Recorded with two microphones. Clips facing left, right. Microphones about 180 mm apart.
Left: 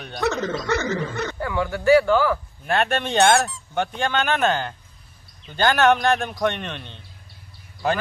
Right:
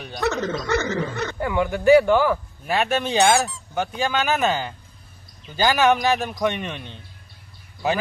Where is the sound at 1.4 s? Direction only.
20° right (ahead or behind).